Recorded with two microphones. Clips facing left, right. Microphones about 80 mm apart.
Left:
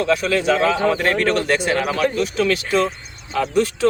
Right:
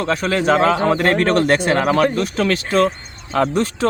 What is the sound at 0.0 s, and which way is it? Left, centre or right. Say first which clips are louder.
Speech: even; right.